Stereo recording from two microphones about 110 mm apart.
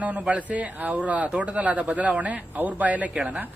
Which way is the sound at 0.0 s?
15° right (ahead or behind).